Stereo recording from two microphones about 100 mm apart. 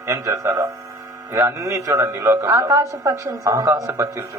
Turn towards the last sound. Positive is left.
turn(degrees=-30)  # may be behind; listen again after turning